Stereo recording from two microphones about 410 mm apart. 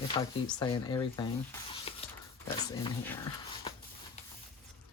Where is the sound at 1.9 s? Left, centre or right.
Centre.